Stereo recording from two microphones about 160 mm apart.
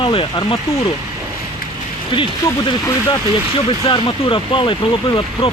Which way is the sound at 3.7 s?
35° left (ahead or behind).